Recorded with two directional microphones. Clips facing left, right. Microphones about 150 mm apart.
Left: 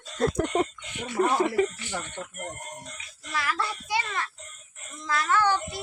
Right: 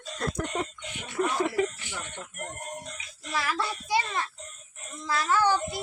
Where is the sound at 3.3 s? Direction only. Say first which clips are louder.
Even; 30° right (ahead or behind).